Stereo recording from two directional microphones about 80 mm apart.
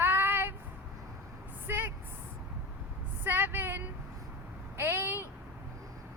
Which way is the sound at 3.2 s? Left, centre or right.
Right.